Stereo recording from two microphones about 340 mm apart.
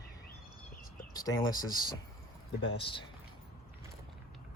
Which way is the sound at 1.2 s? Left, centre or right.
Centre.